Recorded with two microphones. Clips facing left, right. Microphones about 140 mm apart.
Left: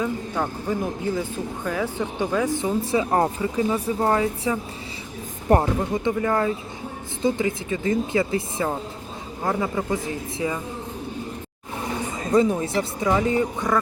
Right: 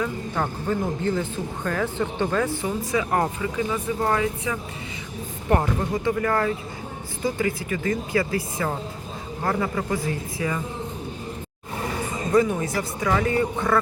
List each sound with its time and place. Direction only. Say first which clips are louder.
0.3 s speech: right 2 dB; 10° left (ahead or behind)
12.5 s speech: left 2 dB; 25° left (ahead or behind)